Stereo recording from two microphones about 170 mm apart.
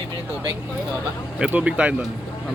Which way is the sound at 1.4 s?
10° right (ahead or behind).